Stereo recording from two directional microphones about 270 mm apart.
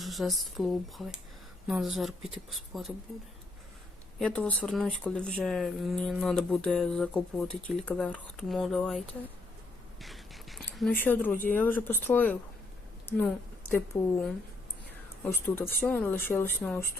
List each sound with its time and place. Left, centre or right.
0.0 s speech: centre
4.2 s speech: centre
13.9 s speech: left
15.4 s speech: centre